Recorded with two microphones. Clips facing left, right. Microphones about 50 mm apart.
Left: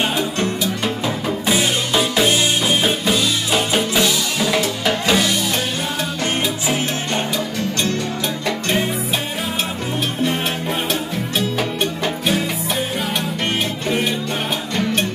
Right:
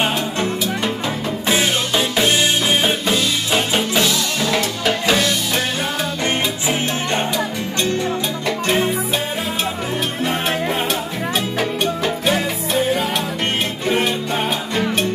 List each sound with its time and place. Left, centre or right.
2.0 s music: centre
2.7 s music: centre
3.1 s music: centre
11.3 s music: centre